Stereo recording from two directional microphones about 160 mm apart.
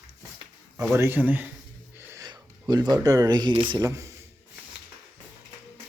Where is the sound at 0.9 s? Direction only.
15° right (ahead or behind).